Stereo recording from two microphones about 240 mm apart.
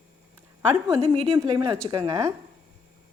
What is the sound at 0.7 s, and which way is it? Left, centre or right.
A woman's voice, centre.